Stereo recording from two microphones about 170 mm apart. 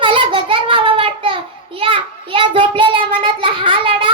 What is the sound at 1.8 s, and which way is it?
Child singing, 30° right (ahead or behind).